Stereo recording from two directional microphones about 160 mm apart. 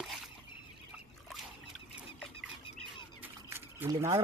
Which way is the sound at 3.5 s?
15° right (ahead or behind).